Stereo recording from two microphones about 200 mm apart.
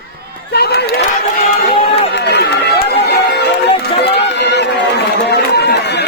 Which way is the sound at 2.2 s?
55° left (ahead or behind).